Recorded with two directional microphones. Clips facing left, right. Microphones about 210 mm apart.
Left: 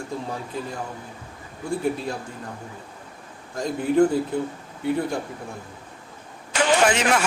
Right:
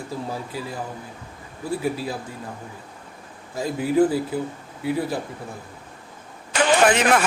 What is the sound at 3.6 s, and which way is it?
A man's voice, 5° right (ahead or behind).